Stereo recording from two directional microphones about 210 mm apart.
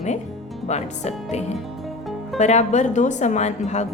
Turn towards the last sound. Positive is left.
turn(degrees=35)  # may be behind; listen again after turning